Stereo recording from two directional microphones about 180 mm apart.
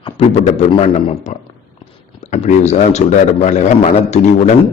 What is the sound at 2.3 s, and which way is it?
A man's voice, 40° left (ahead or behind).